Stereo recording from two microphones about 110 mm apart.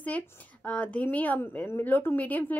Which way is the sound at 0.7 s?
10° left (ahead or behind).